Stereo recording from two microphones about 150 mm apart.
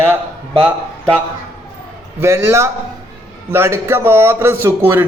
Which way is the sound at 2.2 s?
15° right (ahead or behind).